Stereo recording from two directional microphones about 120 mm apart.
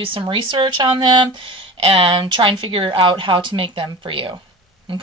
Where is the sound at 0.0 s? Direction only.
45° right (ahead or behind).